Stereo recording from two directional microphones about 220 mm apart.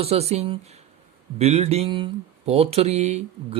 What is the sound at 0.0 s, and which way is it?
Speech, 30° right (ahead or behind).